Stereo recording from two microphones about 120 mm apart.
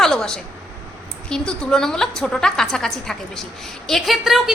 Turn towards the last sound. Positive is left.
turn(degrees=0)  # may be behind; listen again after turning